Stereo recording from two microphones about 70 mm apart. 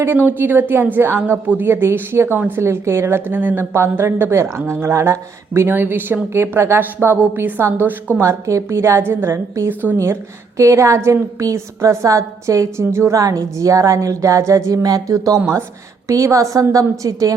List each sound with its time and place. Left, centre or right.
0.0 s a woman's voice: right
8.2 s a woman's voice: right
10.6 s a woman's voice: right